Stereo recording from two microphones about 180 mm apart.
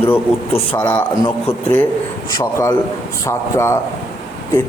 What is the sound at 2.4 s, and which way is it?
Speech, 15° left (ahead or behind).